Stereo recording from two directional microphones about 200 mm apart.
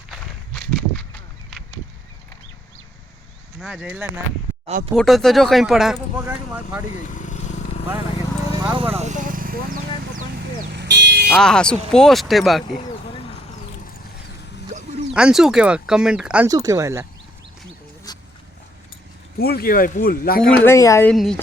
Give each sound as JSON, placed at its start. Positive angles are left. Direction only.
{"t": 0.1, "sound": "walk", "side_deg": 0}
{"t": 3.6, "sound": "speech", "side_deg": -10}
{"t": 6.9, "sound": "vehicle", "side_deg": 40}
{"t": 8.7, "sound": "vehicle", "side_deg": -30}
{"t": 10.7, "sound": "vehicle", "side_deg": -60}
{"t": 11.3, "sound": "speech", "side_deg": 5}
{"t": 14.7, "sound": "a sound", "side_deg": -35}
{"t": 15.1, "sound": "speech", "side_deg": -5}
{"t": 16.5, "sound": "speech", "side_deg": -15}
{"t": 19.4, "sound": "speech", "side_deg": 50}
{"t": 20.4, "sound": "speech", "side_deg": 10}
{"t": 21.1, "sound": "speech", "side_deg": 5}